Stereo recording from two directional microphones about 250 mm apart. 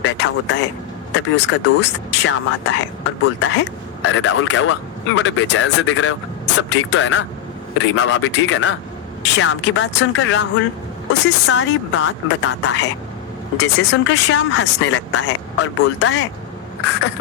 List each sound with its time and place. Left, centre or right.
0.0 s vehicle: left
1.1 s speech: left